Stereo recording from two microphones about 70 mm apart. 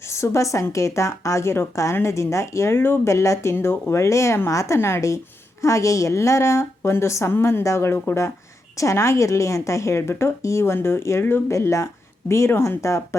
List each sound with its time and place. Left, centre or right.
0.1 s a woman's voice: left
3.1 s a woman's voice: left
8.8 s a woman's voice: left
11.5 s a woman's voice: left